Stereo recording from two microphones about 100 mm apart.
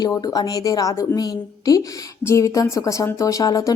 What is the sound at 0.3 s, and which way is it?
Speech, 40° left (ahead or behind).